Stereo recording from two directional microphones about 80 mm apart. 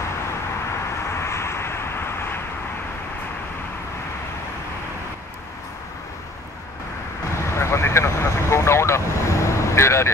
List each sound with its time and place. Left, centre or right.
1.0 s vehicle: left
7.3 s vehicle: left